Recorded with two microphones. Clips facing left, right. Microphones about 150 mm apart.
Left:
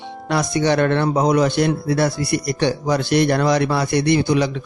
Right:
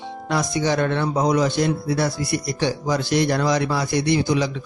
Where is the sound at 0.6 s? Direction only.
65° left (ahead or behind).